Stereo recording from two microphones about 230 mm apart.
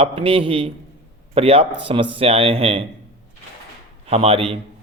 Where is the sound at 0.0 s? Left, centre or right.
Right.